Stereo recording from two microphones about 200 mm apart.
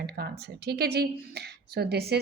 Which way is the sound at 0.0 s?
50° right (ahead or behind).